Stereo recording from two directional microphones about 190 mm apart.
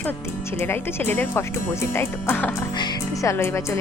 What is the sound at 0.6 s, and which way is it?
Speech, 10° left (ahead or behind).